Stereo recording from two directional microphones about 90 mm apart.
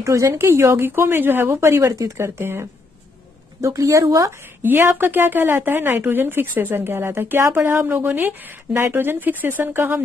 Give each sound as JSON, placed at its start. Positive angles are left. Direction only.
{"t": 0.0, "sound": "a woman's voice", "side_deg": -35}
{"t": 3.6, "sound": "a woman's voice", "side_deg": -35}
{"t": 4.6, "sound": "speech", "side_deg": -25}